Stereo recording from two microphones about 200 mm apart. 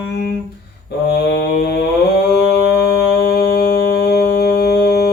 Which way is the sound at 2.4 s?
55° left (ahead or behind).